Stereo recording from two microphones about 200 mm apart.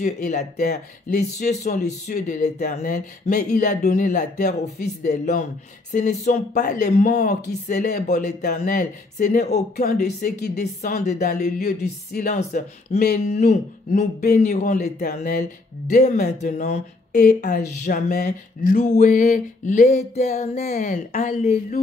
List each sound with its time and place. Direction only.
0.0 s speech: 40° left (ahead or behind)
7.8 s speech: 50° left (ahead or behind); by 10.7 s 35° left (ahead or behind)
11.1 s speech: 45° left (ahead or behind)